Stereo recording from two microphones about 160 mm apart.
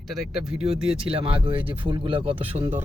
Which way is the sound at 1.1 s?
35° right (ahead or behind).